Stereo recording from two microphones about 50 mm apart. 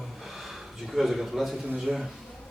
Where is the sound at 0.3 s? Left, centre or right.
Centre.